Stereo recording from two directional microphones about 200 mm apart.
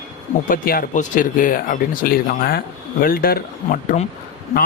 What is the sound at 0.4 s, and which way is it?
A man's voice, 45° left (ahead or behind).